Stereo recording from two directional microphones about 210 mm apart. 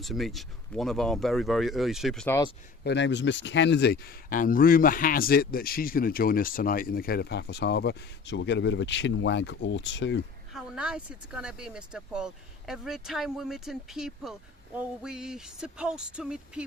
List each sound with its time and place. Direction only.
0.0 s speech: centre (ahead or behind)
2.8 s speech: 55° left (ahead or behind)
10.5 s speech: 5° right (ahead or behind)